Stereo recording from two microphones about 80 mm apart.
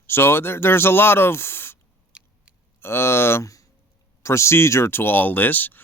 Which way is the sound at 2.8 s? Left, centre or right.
Left.